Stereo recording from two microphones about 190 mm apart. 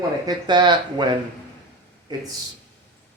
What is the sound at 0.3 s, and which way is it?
Speech, 25° right (ahead or behind).